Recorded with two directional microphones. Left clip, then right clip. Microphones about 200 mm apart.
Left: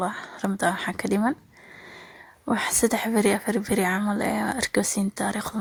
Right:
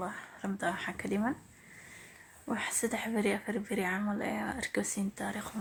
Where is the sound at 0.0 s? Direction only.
40° left (ahead or behind).